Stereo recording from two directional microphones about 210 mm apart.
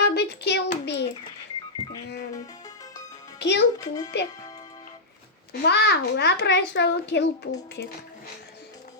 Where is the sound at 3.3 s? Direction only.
55° left (ahead or behind).